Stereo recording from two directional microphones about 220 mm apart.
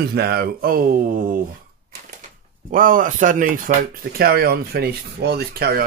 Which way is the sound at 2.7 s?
40° right (ahead or behind).